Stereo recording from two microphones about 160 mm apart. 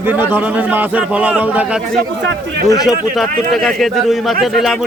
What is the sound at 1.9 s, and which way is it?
Speech, 90° right.